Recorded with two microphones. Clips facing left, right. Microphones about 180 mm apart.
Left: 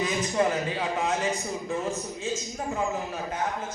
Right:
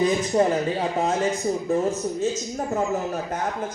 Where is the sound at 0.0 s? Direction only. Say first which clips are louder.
Right 5 dB; 35° right (ahead or behind).